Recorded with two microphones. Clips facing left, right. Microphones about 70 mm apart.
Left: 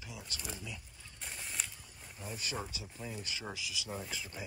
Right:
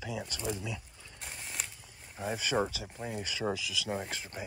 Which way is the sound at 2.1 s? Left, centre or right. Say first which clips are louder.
Right 10 dB; right.